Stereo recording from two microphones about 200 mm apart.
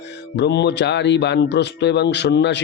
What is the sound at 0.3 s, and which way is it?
Speech, 60° left (ahead or behind).